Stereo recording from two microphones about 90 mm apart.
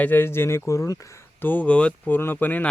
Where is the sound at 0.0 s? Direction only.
25° left (ahead or behind).